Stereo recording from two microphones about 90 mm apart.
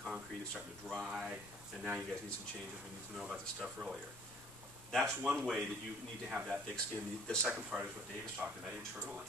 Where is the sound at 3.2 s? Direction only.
10° right (ahead or behind).